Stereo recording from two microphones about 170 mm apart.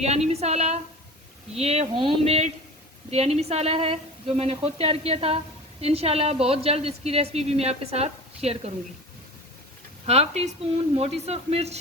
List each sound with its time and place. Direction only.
0.0 s a woman's voice: 40° right (ahead or behind)
10.1 s a woman's voice: 40° right (ahead or behind)